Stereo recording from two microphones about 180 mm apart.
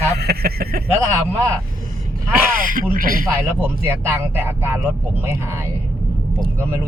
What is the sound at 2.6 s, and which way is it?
Speech, 50° right (ahead or behind).